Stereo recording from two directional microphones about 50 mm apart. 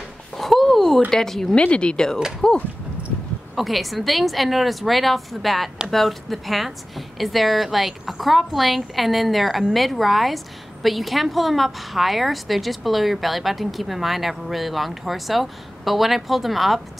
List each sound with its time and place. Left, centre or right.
0.4 s a sound: centre
1.1 s speech: centre
1.5 s speech: left
3.5 s a woman's voice: centre